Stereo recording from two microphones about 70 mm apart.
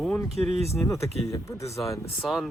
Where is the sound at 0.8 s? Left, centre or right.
Left.